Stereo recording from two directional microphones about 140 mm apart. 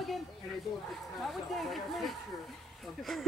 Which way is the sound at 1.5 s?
Centre (ahead or behind).